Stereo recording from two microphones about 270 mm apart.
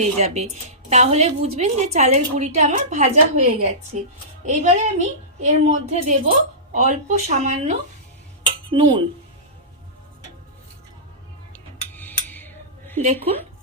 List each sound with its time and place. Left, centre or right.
0.0 s a woman's voice: right
11.5 s a sound: centre
13.0 s a woman's voice: right